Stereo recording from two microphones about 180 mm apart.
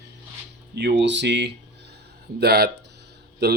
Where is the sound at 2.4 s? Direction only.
60° right (ahead or behind).